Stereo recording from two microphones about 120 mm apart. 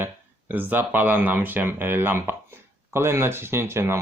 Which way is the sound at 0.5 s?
15° right (ahead or behind).